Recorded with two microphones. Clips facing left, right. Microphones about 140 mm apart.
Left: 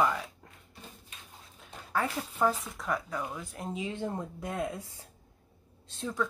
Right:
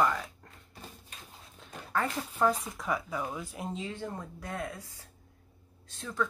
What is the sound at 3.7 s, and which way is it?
Speech, 15° left (ahead or behind).